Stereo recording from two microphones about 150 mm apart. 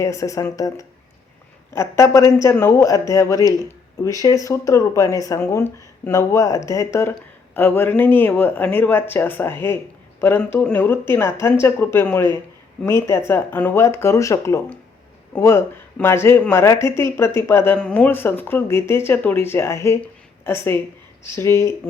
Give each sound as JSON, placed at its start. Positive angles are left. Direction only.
{"t": 0.0, "sound": "speech", "side_deg": 20}